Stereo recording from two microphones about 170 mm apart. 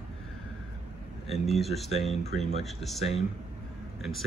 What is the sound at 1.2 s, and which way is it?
Speech, centre (ahead or behind).